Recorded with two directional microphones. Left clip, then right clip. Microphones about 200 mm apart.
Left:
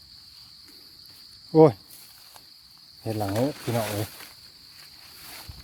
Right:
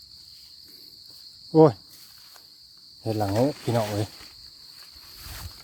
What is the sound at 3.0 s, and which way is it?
Speech, 20° right (ahead or behind).